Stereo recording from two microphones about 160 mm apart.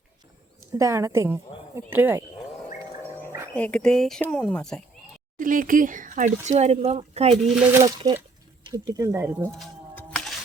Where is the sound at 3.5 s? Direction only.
10° left (ahead or behind).